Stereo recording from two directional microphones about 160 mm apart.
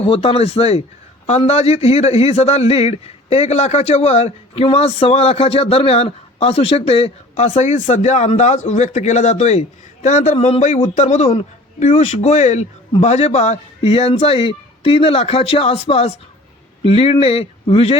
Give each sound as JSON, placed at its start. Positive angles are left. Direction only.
{"t": 0.0, "sound": "a man's voice", "side_deg": 35}